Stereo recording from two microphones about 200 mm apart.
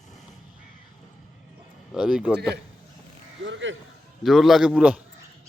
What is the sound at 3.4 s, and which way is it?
Speech, 70° right (ahead or behind).